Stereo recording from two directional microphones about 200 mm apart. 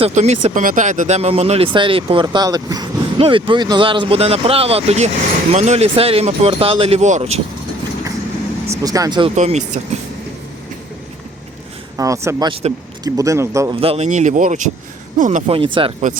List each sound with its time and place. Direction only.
0.0 s speech: 35° right (ahead or behind)
8.7 s speech: 15° right (ahead or behind)
9.3 s speech: 35° right (ahead or behind)
11.9 s a man's voice: 15° right (ahead or behind)
13.7 s speech: 30° right (ahead or behind)